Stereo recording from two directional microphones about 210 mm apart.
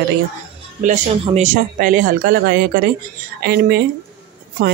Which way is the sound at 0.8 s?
30° right (ahead or behind).